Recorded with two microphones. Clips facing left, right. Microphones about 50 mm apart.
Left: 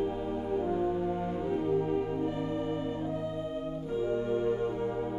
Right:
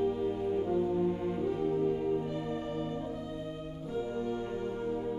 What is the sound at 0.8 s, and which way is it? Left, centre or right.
Music, left.